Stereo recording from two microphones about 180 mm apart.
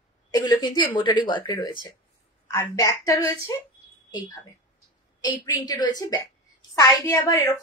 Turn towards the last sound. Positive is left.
turn(degrees=15)  # may be behind; listen again after turning